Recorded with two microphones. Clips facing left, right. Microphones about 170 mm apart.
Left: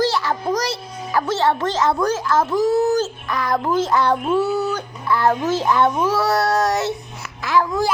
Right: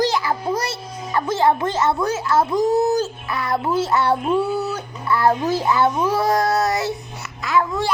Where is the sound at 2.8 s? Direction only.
15° right (ahead or behind).